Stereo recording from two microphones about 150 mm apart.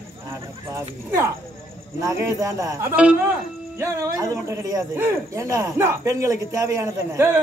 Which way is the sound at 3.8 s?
20° right (ahead or behind).